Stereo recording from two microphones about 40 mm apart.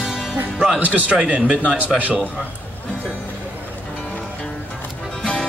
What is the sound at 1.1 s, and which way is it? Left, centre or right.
Speech, right.